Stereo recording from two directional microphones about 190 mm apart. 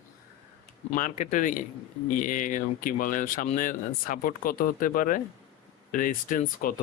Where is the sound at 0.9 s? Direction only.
45° left (ahead or behind).